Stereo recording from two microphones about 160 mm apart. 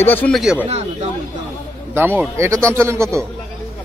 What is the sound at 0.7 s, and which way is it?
Speech, 45° right (ahead or behind).